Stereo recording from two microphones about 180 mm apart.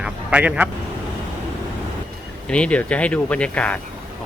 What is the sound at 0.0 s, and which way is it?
Vehicle, 5° right (ahead or behind).